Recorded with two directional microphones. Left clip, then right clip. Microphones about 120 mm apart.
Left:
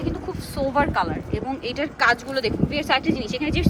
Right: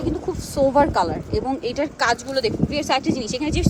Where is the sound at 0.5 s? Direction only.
50° right (ahead or behind).